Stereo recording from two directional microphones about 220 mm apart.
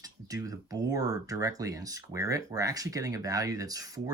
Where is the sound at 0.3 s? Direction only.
15° right (ahead or behind).